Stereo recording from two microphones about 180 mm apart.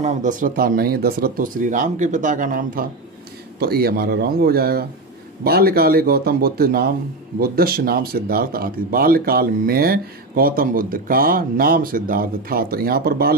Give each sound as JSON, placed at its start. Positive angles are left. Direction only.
{"t": 0.0, "sound": "speech", "side_deg": -45}